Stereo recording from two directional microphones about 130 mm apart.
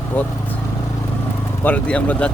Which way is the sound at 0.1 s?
15° left (ahead or behind).